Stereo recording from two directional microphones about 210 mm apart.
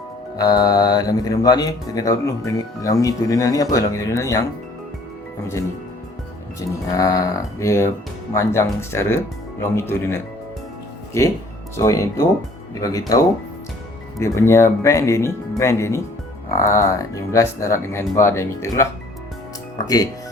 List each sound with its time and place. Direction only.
0.3 s speech: 15° left (ahead or behind)
6.6 s speech: 15° left (ahead or behind)
11.8 s speech: 15° left (ahead or behind)